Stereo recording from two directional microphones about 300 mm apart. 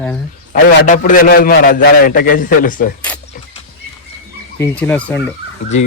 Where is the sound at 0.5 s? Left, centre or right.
Left.